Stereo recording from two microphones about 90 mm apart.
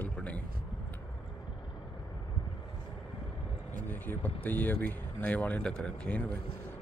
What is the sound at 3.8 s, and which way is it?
Speech, 20° left (ahead or behind).